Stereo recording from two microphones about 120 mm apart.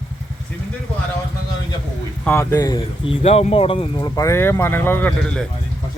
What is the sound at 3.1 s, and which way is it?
Speech, 55° left (ahead or behind).